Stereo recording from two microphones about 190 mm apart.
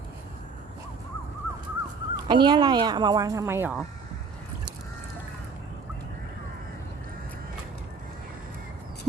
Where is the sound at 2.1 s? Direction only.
25° right (ahead or behind).